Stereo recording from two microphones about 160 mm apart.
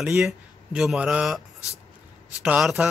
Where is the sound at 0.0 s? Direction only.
5° right (ahead or behind).